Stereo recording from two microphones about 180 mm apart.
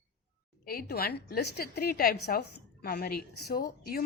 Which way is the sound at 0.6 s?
55° left (ahead or behind).